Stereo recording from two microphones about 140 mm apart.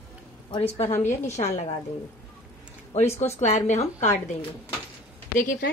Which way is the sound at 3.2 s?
50° left (ahead or behind).